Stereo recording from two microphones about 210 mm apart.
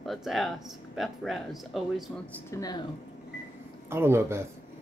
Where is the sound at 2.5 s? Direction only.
15° left (ahead or behind).